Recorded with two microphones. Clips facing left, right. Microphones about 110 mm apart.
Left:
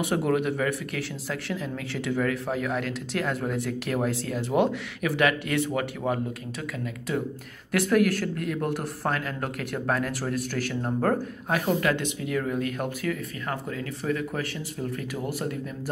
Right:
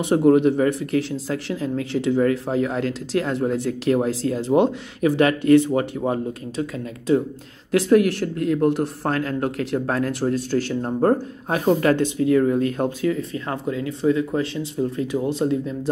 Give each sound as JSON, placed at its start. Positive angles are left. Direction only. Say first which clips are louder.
{"t": 0.0, "sound": "speech", "louder": "right 9 dB", "side_deg": -30}